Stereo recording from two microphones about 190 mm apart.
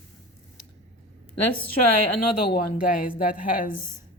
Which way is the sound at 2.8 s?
50° left (ahead or behind).